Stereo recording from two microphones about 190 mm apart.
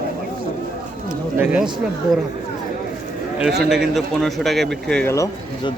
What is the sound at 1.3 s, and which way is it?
Speech, 10° right (ahead or behind).